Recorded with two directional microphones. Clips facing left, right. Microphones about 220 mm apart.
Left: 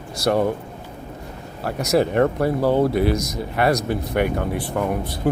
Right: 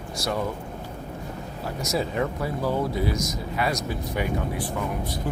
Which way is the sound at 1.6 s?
65° left (ahead or behind).